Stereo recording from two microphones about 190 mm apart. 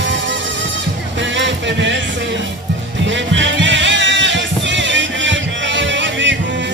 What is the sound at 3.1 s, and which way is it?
Music, 75° right (ahead or behind).